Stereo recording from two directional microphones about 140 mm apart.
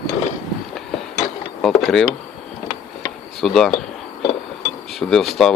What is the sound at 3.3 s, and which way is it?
Speech, 5° left (ahead or behind).